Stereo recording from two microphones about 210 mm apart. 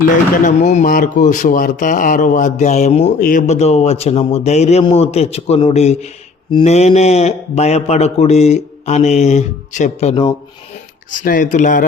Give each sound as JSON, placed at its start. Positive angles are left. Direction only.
{"t": 0.4, "sound": "a man's voice", "side_deg": 40}